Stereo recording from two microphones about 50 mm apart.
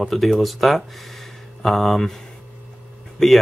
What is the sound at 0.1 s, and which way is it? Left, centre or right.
Speech, centre.